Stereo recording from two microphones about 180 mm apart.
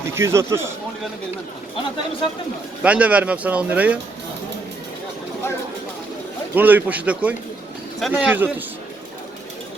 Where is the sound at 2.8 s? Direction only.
5° right (ahead or behind).